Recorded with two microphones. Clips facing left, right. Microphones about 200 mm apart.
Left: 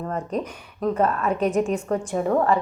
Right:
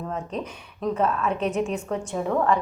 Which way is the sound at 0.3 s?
10° left (ahead or behind).